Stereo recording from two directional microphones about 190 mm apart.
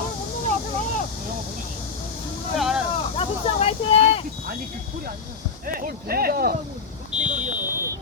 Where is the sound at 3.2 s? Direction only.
30° left (ahead or behind).